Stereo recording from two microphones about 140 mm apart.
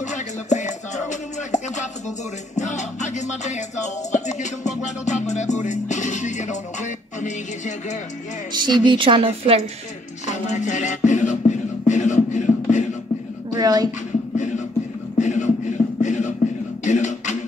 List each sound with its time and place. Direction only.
0.0 s music: 60° left (ahead or behind)
8.6 s a woman's voice: 35° right (ahead or behind)
10.2 s music: 55° left (ahead or behind)
13.6 s a sound: 30° right (ahead or behind)
14.3 s music: 60° left (ahead or behind)
15.1 s beatboxing: 60° left (ahead or behind)
16.8 s a sound: 60° left (ahead or behind)